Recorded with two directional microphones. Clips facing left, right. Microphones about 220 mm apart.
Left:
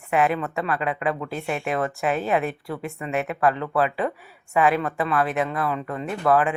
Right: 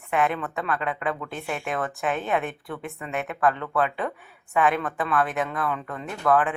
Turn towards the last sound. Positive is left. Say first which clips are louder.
# left 2 dB
turn(degrees=10)  # may be behind; listen again after turning